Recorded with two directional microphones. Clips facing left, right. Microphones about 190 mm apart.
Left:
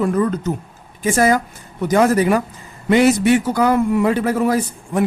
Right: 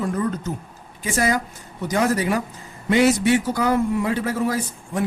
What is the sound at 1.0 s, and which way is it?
A man's voice, 50° left (ahead or behind).